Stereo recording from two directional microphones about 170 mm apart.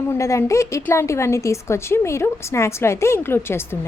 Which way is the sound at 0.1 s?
15° left (ahead or behind).